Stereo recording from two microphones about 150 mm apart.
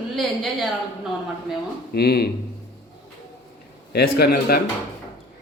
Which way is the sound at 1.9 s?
90° left.